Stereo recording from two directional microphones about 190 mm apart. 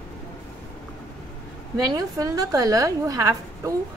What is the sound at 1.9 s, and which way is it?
A woman's voice, 20° right (ahead or behind).